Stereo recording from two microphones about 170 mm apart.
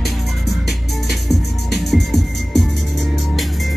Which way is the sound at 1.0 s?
75° left (ahead or behind).